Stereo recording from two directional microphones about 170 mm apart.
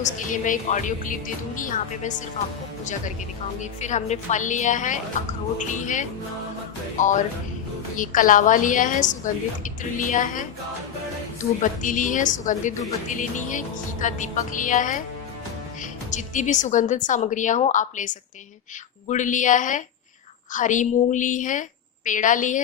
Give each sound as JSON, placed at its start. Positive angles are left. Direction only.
{"t": 0.0, "sound": "a woman's voice", "side_deg": 50}
{"t": 3.6, "sound": "a woman's voice", "side_deg": 45}
{"t": 11.6, "sound": "a woman's voice", "side_deg": 50}